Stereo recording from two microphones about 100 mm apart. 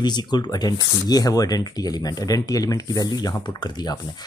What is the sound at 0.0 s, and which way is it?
Speech, 45° left (ahead or behind).